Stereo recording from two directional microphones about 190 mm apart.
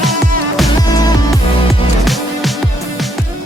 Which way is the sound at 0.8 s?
20° left (ahead or behind).